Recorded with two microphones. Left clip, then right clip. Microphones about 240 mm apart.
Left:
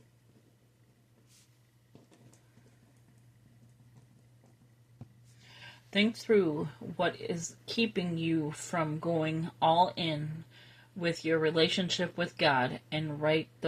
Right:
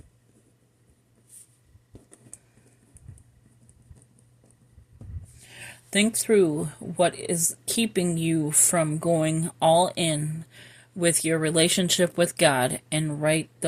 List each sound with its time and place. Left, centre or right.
5.4 s speech: right